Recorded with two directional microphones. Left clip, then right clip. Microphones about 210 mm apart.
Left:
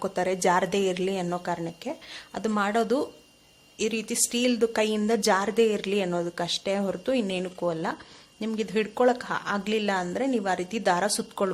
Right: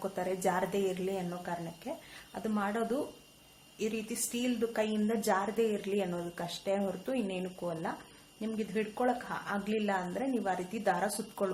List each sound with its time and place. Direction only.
0.0 s a woman's voice: 40° left (ahead or behind)